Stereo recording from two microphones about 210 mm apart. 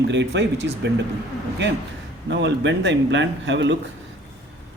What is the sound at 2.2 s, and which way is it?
Speech, 55° right (ahead or behind).